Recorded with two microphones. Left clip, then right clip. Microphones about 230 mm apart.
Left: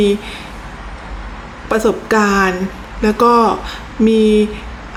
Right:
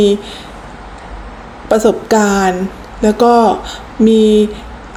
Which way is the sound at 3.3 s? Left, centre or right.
Left.